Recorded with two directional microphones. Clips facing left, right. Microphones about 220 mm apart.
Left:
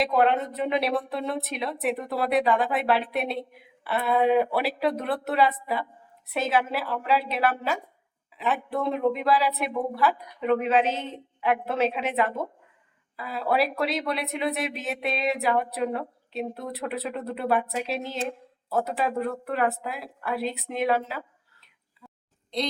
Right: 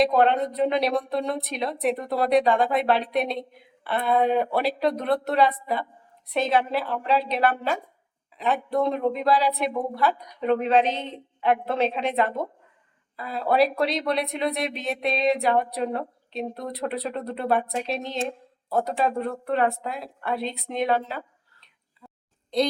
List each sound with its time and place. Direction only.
0.2 s speech: 5° left (ahead or behind)
19.3 s speech: 30° right (ahead or behind)
19.9 s speech: 5° left (ahead or behind)